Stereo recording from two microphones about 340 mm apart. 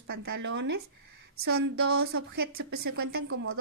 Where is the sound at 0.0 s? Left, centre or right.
Right.